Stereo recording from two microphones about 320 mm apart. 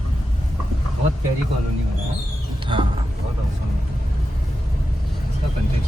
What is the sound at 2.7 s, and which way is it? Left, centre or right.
Speech, centre.